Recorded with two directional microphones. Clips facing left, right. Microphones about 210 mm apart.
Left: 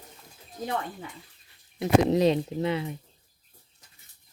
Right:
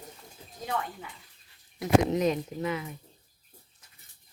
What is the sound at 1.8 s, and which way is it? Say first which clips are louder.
Speech: left 3 dB; 30° left (ahead or behind).